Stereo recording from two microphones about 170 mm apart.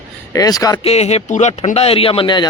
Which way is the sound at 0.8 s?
40° left (ahead or behind).